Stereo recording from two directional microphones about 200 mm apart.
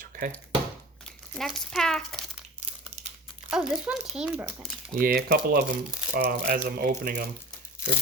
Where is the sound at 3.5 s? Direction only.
Centre (ahead or behind).